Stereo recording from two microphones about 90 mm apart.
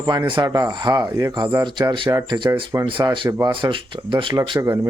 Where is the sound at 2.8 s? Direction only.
65° right (ahead or behind).